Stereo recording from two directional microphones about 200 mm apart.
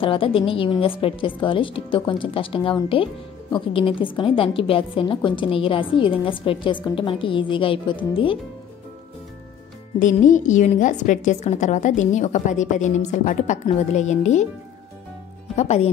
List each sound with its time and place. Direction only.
0.0 s a woman's voice: 25° left (ahead or behind)
9.9 s a woman's voice: 40° left (ahead or behind)
15.5 s a woman's voice: 30° left (ahead or behind)